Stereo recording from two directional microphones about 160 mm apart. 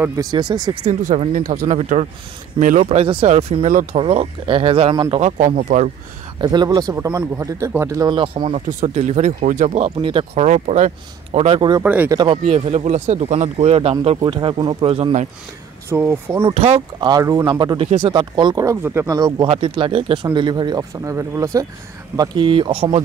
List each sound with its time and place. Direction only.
0.0 s speech: 20° right (ahead or behind)
0.8 s speech: 40° right (ahead or behind)
5.2 s speech: 55° right (ahead or behind)
6.4 s speech: 25° right (ahead or behind)
10.4 s speech: 45° right (ahead or behind)
11.8 s speech: 10° right (ahead or behind)
12.1 s speech: 30° right (ahead or behind)
15.9 s speech: 15° right (ahead or behind)
16.4 s speech: 35° right (ahead or behind)
17.7 s speech: 35° right (ahead or behind)